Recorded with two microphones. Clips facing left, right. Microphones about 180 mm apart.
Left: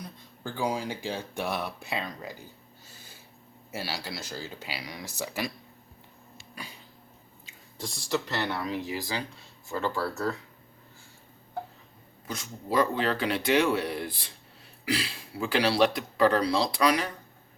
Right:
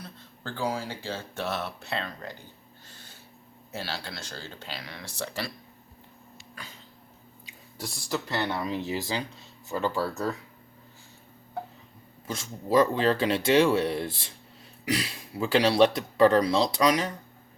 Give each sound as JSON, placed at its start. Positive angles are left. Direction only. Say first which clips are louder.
{"t": 0.0, "sound": "speech", "louder": "left 2 dB", "side_deg": 15}
{"t": 2.8, "sound": "a sound", "louder": "right 1 dB", "side_deg": 10}
{"t": 3.7, "sound": "speech", "louder": "left 1 dB", "side_deg": 10}
{"t": 6.6, "sound": "speech", "louder": "left 3 dB", "side_deg": 10}
{"t": 8.4, "sound": "speech", "louder": "right 1 dB", "side_deg": -20}
{"t": 12.3, "sound": "speech", "louder": "right 5 dB", "side_deg": -25}